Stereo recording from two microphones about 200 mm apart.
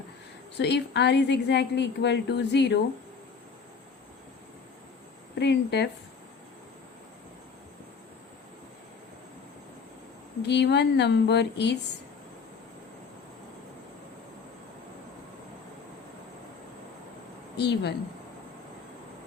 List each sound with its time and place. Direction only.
0.6 s a woman's voice: 60° left (ahead or behind)
5.3 s speech: 55° left (ahead or behind)
10.4 s a woman's voice: 60° left (ahead or behind)
17.6 s a woman's voice: 60° left (ahead or behind)